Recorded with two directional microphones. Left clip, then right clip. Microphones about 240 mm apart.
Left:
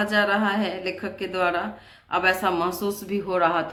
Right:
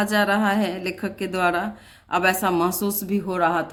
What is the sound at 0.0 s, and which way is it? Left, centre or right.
A woman's voice, right.